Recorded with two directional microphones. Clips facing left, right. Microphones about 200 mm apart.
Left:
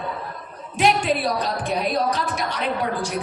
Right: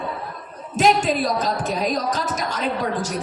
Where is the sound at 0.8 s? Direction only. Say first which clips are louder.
Right 2 dB; 40° right (ahead or behind).